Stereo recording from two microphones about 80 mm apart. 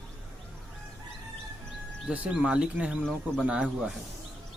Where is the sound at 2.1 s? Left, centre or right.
Centre.